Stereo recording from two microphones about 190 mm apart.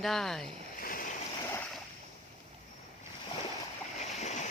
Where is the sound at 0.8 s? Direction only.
50° left (ahead or behind).